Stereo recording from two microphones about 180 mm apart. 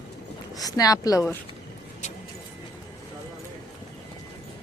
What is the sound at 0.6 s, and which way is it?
Speech, 20° left (ahead or behind).